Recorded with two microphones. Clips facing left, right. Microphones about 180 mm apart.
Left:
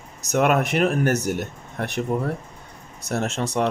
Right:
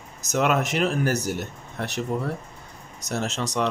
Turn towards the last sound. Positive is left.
turn(degrees=55)  # may be behind; listen again after turning